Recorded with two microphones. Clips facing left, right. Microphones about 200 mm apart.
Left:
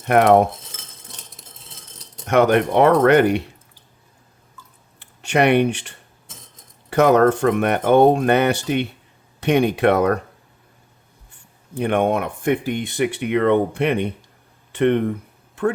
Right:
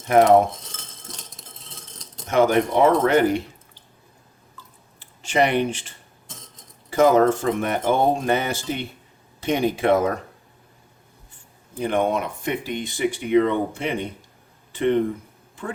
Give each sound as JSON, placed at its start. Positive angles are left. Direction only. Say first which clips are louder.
{"t": 0.0, "sound": "speech", "louder": "left 1 dB", "side_deg": 65}
{"t": 2.2, "sound": "speech", "louder": "left 3 dB", "side_deg": 65}
{"t": 4.9, "sound": "speech", "louder": "left 2 dB", "side_deg": 65}
{"t": 6.9, "sound": "speech", "louder": "left 2 dB", "side_deg": 65}
{"t": 11.8, "sound": "speech", "louder": "left 3 dB", "side_deg": 60}